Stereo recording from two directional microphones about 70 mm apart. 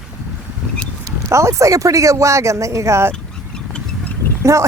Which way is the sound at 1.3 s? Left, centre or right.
Right.